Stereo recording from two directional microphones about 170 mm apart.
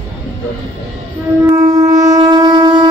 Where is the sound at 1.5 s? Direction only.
20° right (ahead or behind).